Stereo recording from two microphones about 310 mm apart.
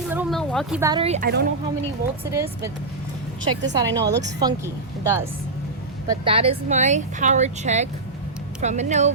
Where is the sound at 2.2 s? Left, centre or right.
Centre.